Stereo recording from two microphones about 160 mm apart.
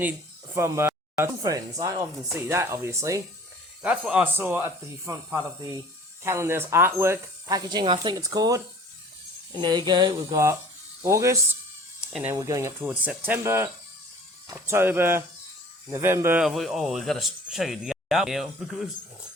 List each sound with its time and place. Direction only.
0.5 s speech: 15° right (ahead or behind)
3.8 s speech: 5° right (ahead or behind)
11.9 s a sound: 5° right (ahead or behind)
12.3 s speech: 20° right (ahead or behind)
16.4 s speech: centre (ahead or behind)